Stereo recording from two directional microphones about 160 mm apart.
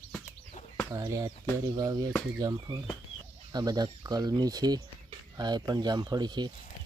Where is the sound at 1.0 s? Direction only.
20° right (ahead or behind).